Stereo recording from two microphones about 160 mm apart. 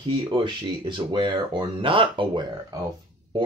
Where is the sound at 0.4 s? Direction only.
30° right (ahead or behind).